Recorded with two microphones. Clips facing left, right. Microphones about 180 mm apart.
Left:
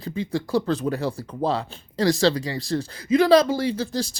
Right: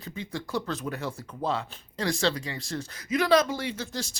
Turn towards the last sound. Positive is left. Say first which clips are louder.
# left 8 dB
turn(degrees=35)  # may be behind; listen again after turning